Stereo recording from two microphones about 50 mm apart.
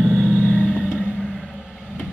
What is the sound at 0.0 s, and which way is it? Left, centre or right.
Vehicle, centre.